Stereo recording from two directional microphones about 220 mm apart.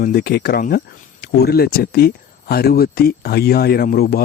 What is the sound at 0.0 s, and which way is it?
Speech, 45° left (ahead or behind).